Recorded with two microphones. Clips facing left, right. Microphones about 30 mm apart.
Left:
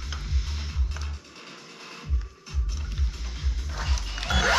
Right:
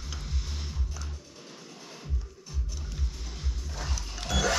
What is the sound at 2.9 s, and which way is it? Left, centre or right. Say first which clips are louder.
Music: left 2 dB; left.